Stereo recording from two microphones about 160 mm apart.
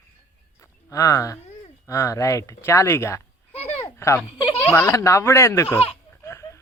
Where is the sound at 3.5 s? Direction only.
40° left (ahead or behind).